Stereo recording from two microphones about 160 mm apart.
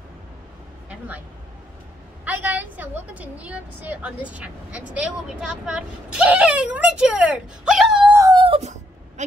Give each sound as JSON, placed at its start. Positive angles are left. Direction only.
{"t": 0.8, "sound": "vehicle", "side_deg": -10}
{"t": 2.2, "sound": "a woman's voice", "side_deg": -10}
{"t": 8.1, "sound": "dog", "side_deg": -20}
{"t": 8.4, "sound": "a sound", "side_deg": -40}